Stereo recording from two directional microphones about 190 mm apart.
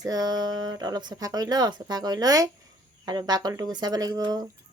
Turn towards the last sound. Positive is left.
turn(degrees=-20)  # may be behind; listen again after turning